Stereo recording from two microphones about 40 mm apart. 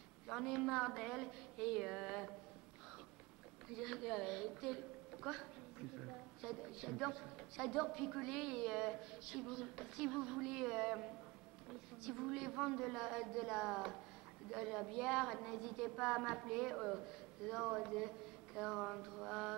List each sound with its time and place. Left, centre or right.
0.3 s a woman's voice: centre
3.6 s a woman's voice: centre